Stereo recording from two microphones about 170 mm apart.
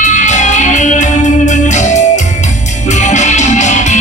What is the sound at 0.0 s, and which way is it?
Music, 45° left (ahead or behind).